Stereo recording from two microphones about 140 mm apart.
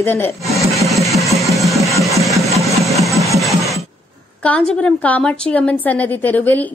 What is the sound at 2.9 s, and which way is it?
Engine, centre (ahead or behind).